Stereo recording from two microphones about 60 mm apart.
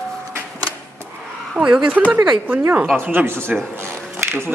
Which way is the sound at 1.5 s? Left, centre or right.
Centre.